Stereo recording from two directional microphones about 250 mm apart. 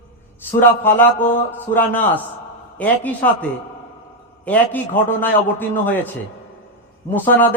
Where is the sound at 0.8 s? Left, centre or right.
Centre.